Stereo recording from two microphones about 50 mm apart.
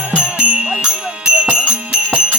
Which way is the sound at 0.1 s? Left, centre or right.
Right.